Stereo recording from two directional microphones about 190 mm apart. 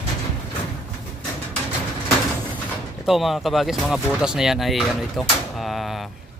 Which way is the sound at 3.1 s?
Centre (ahead or behind).